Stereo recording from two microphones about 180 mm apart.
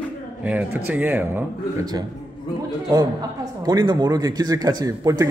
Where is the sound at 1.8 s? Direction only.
20° right (ahead or behind).